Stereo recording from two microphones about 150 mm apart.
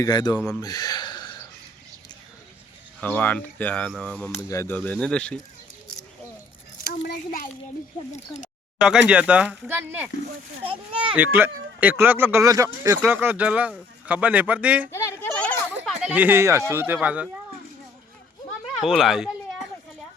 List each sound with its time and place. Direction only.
0.0 s speech: 25° left (ahead or behind)
0.3 s speech: 5° left (ahead or behind)
0.6 s a sound: 25° left (ahead or behind)
3.0 s speech: 10° left (ahead or behind)
4.4 s speech: 20° left (ahead or behind)
6.8 s a sound: 90° left
8.8 s speech: 5° right (ahead or behind)
10.6 s a child's voice: 35° right (ahead or behind)
11.1 s speech: 10° right (ahead or behind)
14.9 s a sound: 20° left (ahead or behind)
16.0 s speech: 10° right (ahead or behind)
18.8 s speech: centre (ahead or behind)